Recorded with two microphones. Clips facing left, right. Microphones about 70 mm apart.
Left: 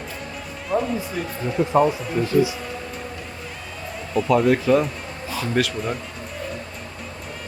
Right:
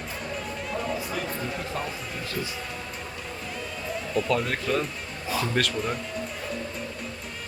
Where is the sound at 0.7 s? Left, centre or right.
Left.